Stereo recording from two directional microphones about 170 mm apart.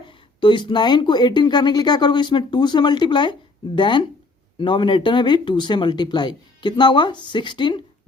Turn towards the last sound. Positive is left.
turn(degrees=25)  # may be behind; listen again after turning